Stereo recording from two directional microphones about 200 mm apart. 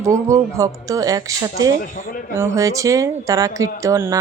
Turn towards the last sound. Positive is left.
turn(degrees=-15)  # may be behind; listen again after turning